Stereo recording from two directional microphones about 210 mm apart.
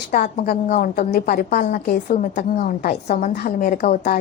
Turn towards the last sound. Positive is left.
turn(degrees=40)  # may be behind; listen again after turning